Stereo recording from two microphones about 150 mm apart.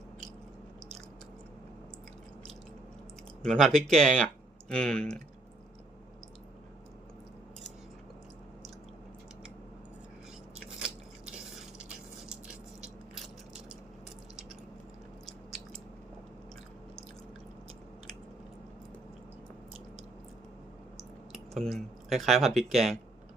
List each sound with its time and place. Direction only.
3.4 s speech: 5° left (ahead or behind)
12.8 s biting: 5° right (ahead or behind)
15.3 s biting: centre (ahead or behind)
21.3 s speech: centre (ahead or behind)